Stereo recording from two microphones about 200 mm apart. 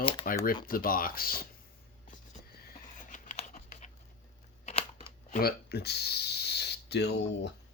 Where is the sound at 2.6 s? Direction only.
40° left (ahead or behind).